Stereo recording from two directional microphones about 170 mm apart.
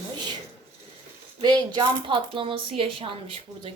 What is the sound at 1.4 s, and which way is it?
Speech, 25° right (ahead or behind).